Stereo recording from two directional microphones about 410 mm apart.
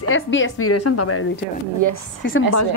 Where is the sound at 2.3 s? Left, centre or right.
Left.